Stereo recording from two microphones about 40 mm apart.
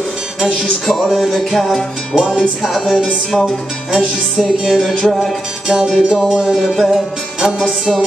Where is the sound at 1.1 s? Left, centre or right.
Centre.